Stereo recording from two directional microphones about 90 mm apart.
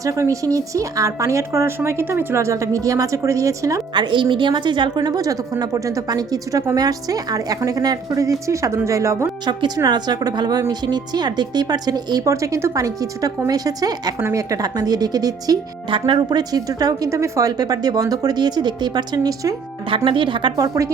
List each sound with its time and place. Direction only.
0.0 s speech: 35° right (ahead or behind)
3.9 s a woman's voice: 60° right (ahead or behind); by 9.3 s 35° right (ahead or behind)
9.5 s a woman's voice: 55° right (ahead or behind)
12.3 s a woman's voice: 35° right (ahead or behind)
15.9 s a woman's voice: 65° right (ahead or behind); by 19.5 s 40° right (ahead or behind)
20.1 s a woman's voice: 65° right (ahead or behind)
20.6 s speech: 40° right (ahead or behind)